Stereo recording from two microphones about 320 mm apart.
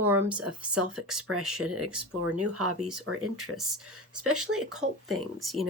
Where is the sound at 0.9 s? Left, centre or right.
Centre.